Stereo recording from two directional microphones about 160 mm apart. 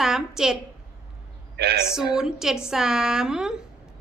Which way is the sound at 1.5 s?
90° right.